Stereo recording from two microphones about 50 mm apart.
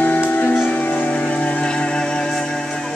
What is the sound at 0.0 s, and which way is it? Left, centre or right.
Music, left.